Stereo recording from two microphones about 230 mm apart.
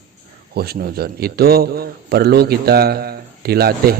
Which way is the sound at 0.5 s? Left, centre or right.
Right.